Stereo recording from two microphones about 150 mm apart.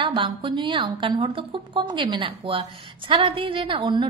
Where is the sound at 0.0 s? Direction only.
35° right (ahead or behind).